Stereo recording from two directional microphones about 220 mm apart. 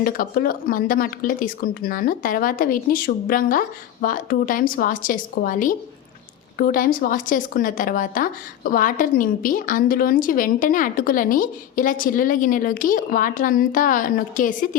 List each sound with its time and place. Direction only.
0.0 s speech: 40° left (ahead or behind)